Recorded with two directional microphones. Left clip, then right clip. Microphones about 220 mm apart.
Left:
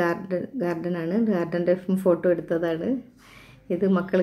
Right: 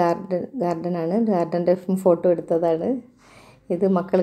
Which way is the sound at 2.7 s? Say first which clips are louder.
Right 5 dB; 5° right (ahead or behind).